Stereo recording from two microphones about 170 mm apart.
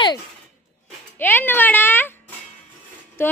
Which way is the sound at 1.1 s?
10° left (ahead or behind).